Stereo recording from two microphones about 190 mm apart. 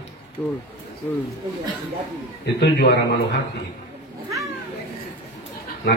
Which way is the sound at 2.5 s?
60° left (ahead or behind).